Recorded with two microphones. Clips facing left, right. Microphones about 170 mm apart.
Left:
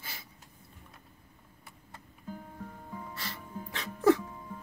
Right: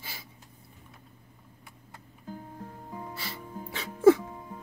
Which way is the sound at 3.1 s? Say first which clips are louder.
Right 2 dB; 5° right (ahead or behind).